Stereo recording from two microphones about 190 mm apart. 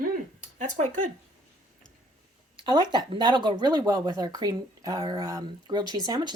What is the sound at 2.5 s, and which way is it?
Speech, 25° right (ahead or behind).